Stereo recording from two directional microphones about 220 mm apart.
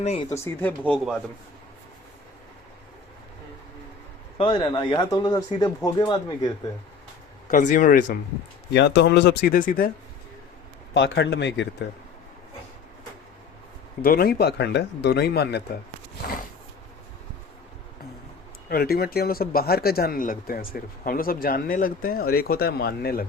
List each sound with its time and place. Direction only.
0.0 s speech: 30° left (ahead or behind)
0.4 s speech: 10° left (ahead or behind)
4.4 s speech: 20° left (ahead or behind)
7.5 s speech: 35° left (ahead or behind)
8.7 s speech: 50° left (ahead or behind)
10.9 s speech: 55° left (ahead or behind)
14.0 s speech: 45° left (ahead or behind)
18.7 s speech: 45° left (ahead or behind)